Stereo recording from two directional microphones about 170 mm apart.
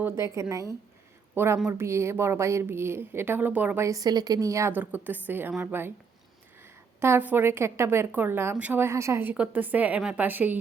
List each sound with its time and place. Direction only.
0.0 s a woman's voice: 15° right (ahead or behind)
7.0 s a woman's voice: 10° right (ahead or behind)